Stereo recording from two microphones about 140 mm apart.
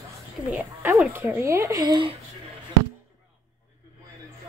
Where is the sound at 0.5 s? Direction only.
10° right (ahead or behind); by 2.0 s 25° right (ahead or behind).